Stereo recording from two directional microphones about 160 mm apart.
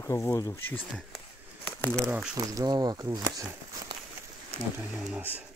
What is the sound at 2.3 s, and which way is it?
Speech, 20° right (ahead or behind).